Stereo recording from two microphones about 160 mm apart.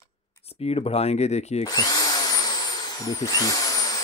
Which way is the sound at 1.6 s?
25° left (ahead or behind).